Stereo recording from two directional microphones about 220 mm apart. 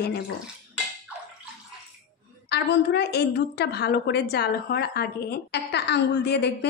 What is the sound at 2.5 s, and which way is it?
A woman's voice, 50° left (ahead or behind).